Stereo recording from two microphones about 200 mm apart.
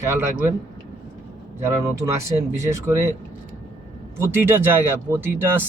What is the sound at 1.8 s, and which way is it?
Speech, 15° right (ahead or behind).